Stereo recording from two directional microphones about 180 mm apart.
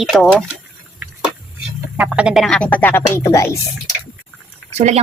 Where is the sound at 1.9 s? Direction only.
5° right (ahead or behind); by 3.5 s 15° left (ahead or behind).